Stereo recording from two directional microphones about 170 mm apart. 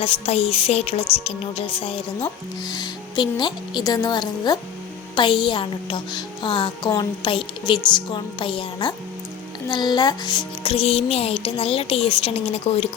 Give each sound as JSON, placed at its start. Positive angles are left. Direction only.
{"t": 0.0, "sound": "a child's voice", "side_deg": 35}